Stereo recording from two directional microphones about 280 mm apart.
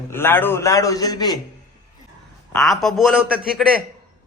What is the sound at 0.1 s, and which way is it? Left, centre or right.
A man's voice, centre.